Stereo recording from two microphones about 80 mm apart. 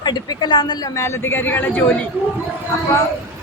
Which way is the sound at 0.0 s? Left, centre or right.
Left.